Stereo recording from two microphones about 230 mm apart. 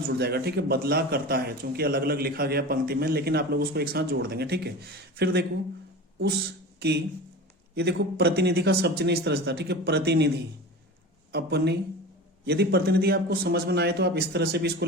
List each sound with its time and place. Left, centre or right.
0.2 s speech: right
6.7 s speech: right